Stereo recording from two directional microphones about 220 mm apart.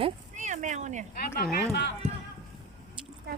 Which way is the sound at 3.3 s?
45° right (ahead or behind).